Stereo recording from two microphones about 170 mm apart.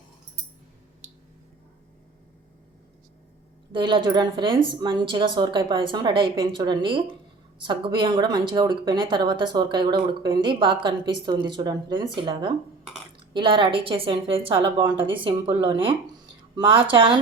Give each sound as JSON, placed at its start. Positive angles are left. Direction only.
{"t": 3.7, "sound": "a woman's voice", "side_deg": -30}